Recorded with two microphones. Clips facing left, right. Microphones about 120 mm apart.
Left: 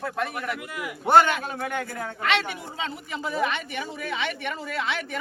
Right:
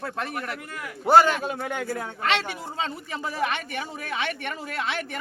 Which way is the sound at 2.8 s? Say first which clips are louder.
Right 2 dB; 40° right (ahead or behind).